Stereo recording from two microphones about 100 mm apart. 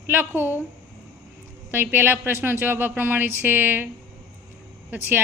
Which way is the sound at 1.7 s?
20° right (ahead or behind).